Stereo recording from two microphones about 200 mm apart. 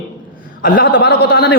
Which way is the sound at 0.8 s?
60° left (ahead or behind).